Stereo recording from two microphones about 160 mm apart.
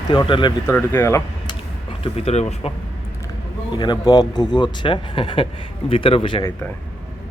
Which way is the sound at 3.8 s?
25° left (ahead or behind).